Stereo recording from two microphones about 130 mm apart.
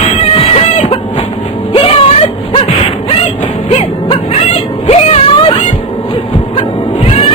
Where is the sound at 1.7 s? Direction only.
50° left (ahead or behind).